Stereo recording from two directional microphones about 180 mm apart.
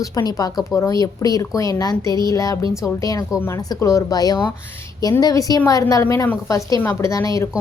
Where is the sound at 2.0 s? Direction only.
25° right (ahead or behind).